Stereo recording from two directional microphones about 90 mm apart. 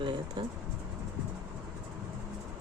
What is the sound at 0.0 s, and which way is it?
Speech, 60° right (ahead or behind).